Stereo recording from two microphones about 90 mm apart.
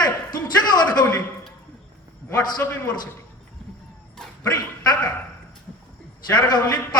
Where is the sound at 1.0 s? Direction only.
15° left (ahead or behind).